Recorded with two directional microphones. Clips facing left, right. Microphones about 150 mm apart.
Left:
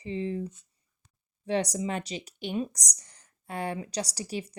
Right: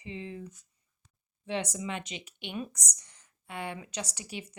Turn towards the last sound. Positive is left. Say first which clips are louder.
# left 7 dB
turn(degrees=35)  # may be behind; listen again after turning